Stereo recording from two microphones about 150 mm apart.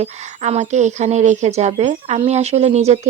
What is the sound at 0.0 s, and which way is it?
Speech, 45° right (ahead or behind).